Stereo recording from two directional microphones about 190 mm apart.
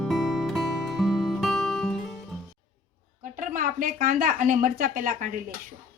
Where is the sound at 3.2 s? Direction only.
45° right (ahead or behind).